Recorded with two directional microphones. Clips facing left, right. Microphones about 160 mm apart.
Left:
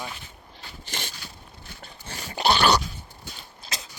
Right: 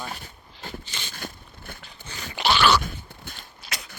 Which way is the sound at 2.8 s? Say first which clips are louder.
Right 3 dB; 50° right (ahead or behind).